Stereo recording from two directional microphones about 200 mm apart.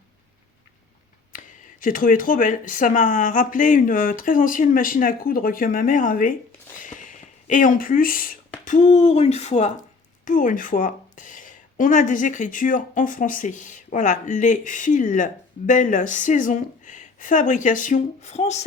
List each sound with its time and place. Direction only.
1.3 s speech: 40° left (ahead or behind)
6.7 s a sound: 40° left (ahead or behind)
8.6 s speech: 40° left (ahead or behind)